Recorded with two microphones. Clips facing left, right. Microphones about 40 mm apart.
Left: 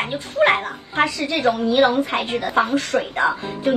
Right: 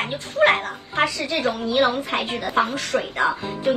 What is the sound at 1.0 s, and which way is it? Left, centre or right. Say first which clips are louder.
Speech: left 3 dB; left.